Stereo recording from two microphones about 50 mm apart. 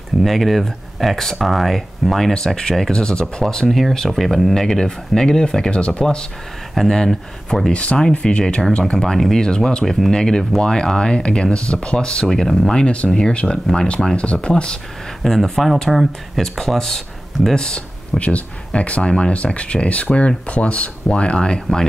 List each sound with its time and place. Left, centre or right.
0.2 s speech: centre; by 6.0 s left
6.7 s speech: centre
7.7 s speech: left
9.8 s speech: centre
10.1 s speech: centre
12.8 s speech: left; by 16.4 s centre
16.4 s speech: centre